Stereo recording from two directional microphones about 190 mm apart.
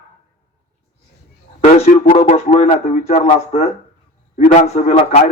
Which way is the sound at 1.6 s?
35° left (ahead or behind).